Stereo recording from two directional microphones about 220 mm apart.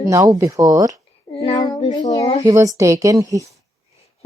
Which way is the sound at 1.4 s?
15° left (ahead or behind).